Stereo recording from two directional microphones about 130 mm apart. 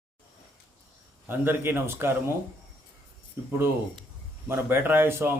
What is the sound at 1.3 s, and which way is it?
Speech, 15° right (ahead or behind).